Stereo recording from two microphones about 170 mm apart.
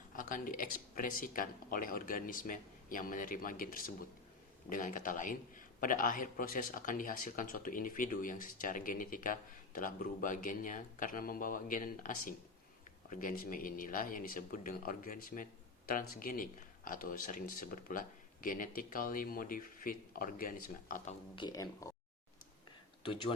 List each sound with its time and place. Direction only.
0.2 s a man's voice: 50° left (ahead or behind)
21.3 s speech: 25° left (ahead or behind)